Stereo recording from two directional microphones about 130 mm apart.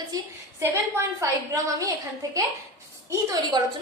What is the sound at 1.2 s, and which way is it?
A woman's voice, 25° right (ahead or behind).